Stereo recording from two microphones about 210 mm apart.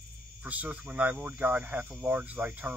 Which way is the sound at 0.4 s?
5° right (ahead or behind).